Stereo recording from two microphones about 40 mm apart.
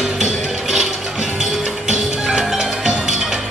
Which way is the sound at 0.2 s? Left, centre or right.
Centre.